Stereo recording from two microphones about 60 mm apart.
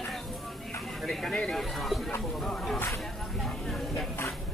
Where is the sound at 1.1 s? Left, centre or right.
Centre.